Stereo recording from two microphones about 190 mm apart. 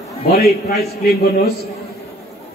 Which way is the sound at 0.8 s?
55° left (ahead or behind).